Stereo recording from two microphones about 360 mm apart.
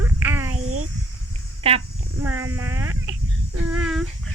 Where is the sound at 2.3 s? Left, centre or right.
Centre.